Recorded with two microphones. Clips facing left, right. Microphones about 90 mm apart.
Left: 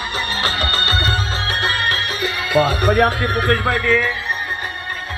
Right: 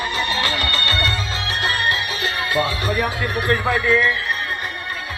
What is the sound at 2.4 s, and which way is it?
Speech, 70° left (ahead or behind).